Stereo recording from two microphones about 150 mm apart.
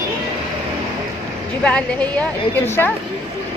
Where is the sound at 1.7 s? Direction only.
10° left (ahead or behind).